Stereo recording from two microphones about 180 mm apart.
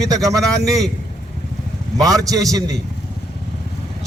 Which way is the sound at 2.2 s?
20° right (ahead or behind).